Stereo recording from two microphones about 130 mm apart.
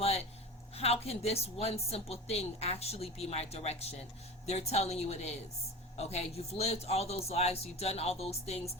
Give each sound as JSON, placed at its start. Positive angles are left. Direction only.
{"t": 0.8, "sound": "a woman's voice", "side_deg": 50}